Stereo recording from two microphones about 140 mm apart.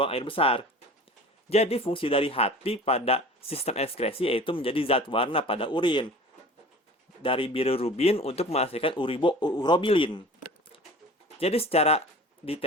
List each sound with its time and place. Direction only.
0.0 s speech: 40° left (ahead or behind)
7.2 s speech: 40° left (ahead or behind)
11.3 s speech: 45° left (ahead or behind)